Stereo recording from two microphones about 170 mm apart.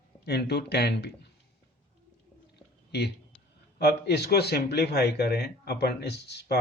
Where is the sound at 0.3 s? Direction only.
75° left (ahead or behind).